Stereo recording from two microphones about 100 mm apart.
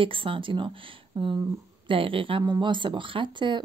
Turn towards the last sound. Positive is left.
turn(degrees=-50)  # may be behind; listen again after turning